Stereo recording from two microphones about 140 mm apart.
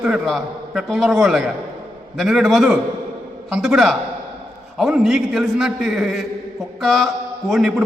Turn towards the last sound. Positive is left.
turn(degrees=0)  # may be behind; listen again after turning